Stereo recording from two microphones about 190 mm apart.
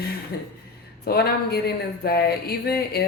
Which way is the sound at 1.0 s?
55° left (ahead or behind).